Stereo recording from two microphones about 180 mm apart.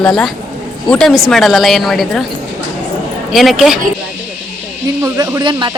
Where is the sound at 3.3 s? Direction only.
Centre (ahead or behind).